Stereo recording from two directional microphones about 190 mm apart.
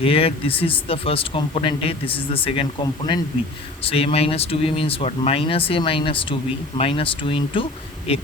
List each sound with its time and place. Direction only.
0.0 s speech: 30° left (ahead or behind)